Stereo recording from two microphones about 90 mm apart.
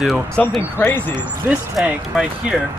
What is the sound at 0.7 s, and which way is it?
Speech, 25° left (ahead or behind).